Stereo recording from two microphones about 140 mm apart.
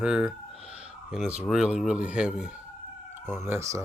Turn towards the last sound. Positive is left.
turn(degrees=-20)  # may be behind; listen again after turning